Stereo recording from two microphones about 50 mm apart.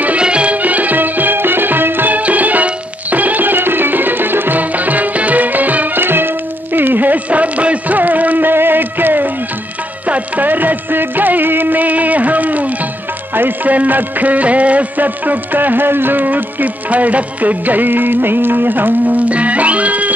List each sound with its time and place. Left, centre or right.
0.2 s music: right
10.0 s music of bollywood: right
13.3 s music: right